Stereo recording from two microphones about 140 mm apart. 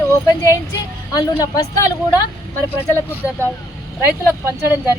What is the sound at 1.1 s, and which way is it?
Speech, 25° left (ahead or behind).